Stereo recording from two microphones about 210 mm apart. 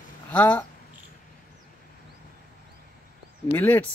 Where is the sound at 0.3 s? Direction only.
5° left (ahead or behind).